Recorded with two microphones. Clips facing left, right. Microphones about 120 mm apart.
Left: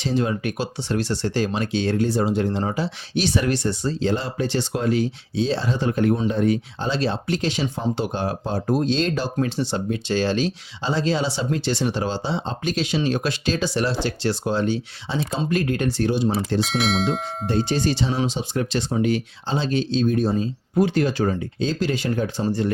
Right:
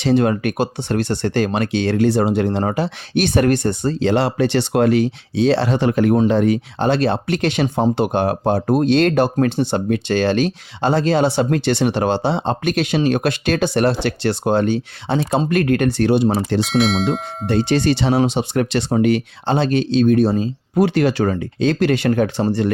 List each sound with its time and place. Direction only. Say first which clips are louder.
0.0 s speech: right 7 dB; 65° right (ahead or behind)
16.6 s speech: right 5 dB; centre (ahead or behind)
17.4 s speech: right 6 dB; 75° right (ahead or behind)